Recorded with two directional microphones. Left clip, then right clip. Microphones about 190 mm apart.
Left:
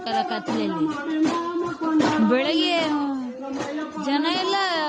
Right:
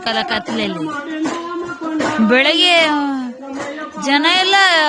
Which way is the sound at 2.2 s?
10° right (ahead or behind).